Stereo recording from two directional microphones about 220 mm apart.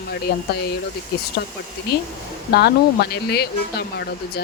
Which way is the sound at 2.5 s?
45° left (ahead or behind).